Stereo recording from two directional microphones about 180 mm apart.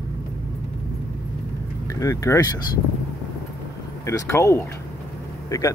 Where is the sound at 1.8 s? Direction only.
15° left (ahead or behind).